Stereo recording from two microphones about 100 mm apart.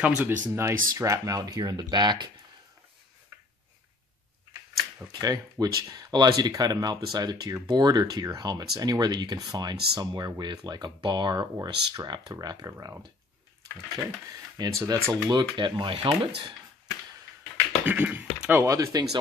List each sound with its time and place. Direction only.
0.2 s speech: 25° right (ahead or behind); by 2.3 s 50° right (ahead or behind)
5.2 s speech: 40° right (ahead or behind)
12.7 s speech: 25° right (ahead or behind)
14.8 s speech: 35° right (ahead or behind)
15.5 s speech: 55° right (ahead or behind)
17.8 s speech: 20° right (ahead or behind)
18.6 s speech: 30° right (ahead or behind)